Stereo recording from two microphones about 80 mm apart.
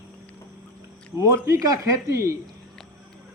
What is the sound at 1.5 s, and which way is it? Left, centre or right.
Speech, right.